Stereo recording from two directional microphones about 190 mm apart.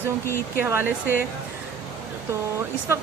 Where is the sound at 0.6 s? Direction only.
10° right (ahead or behind).